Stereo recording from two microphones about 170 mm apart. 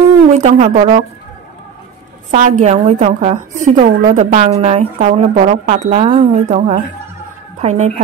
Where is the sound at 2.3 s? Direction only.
40° right (ahead or behind).